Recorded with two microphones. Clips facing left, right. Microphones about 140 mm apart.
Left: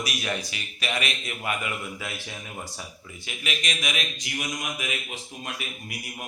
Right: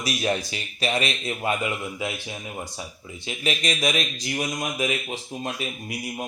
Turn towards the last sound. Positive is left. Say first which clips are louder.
# right 6 dB
turn(degrees=-25)  # may be behind; listen again after turning